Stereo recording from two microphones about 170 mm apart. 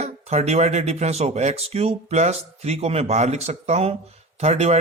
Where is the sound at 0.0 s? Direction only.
40° right (ahead or behind).